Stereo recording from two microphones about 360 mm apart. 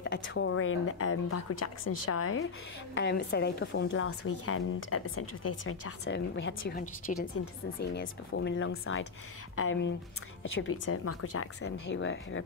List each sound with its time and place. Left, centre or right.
0.0 s a woman's voice: left